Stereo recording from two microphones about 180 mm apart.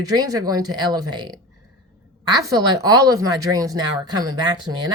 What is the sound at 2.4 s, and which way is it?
Speech, 20° right (ahead or behind).